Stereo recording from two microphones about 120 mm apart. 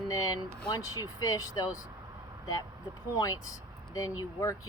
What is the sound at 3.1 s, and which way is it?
Speech, 30° left (ahead or behind).